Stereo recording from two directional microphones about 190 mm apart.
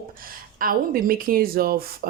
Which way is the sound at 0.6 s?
50° right (ahead or behind).